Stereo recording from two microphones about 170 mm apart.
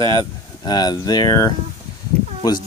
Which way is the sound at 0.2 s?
25° left (ahead or behind).